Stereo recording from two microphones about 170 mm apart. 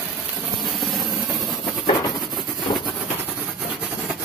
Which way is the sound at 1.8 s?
25° left (ahead or behind).